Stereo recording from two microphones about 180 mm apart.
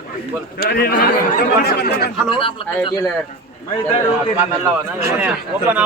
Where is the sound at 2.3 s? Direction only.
30° left (ahead or behind).